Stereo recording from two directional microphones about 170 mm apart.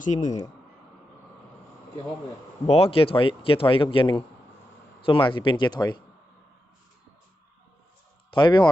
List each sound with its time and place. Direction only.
0.0 s speech: 45° left (ahead or behind)
2.6 s speech: 35° left (ahead or behind)
8.3 s speech: 25° left (ahead or behind)